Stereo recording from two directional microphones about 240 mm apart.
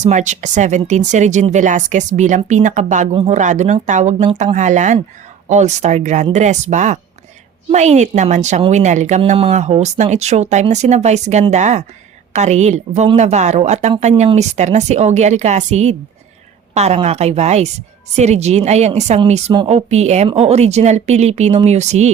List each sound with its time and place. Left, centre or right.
0.0 s speech: right